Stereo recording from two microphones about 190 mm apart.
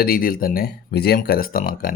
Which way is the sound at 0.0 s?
50° left (ahead or behind).